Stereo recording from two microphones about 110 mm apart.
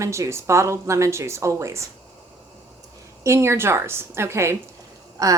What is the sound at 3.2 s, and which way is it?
A woman's voice, 25° right (ahead or behind).